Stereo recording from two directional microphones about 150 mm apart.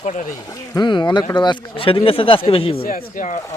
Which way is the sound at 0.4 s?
25° left (ahead or behind).